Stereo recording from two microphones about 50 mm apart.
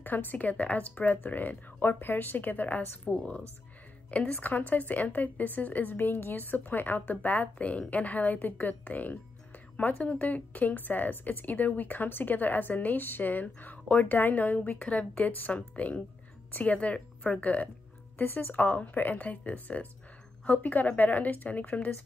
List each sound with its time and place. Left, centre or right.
0.0 s speech: left
3.1 s a woman's voice: left
4.4 s a woman's voice: left
18.1 s speech: left
18.6 s speech: left